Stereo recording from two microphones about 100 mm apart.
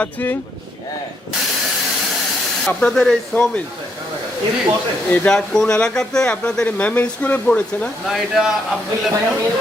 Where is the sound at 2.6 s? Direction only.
5° left (ahead or behind).